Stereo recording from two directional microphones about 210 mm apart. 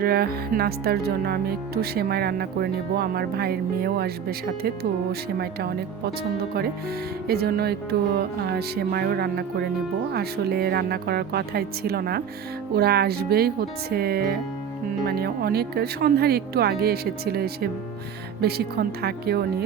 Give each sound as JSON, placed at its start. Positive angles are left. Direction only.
{"t": 0.0, "sound": "speech", "side_deg": -45}
{"t": 7.3, "sound": "speech", "side_deg": -45}